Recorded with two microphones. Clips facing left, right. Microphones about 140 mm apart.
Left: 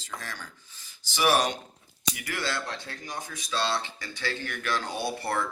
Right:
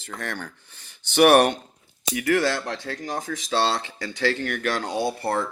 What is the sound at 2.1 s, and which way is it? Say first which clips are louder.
Speech: right 12 dB; 70° right (ahead or behind).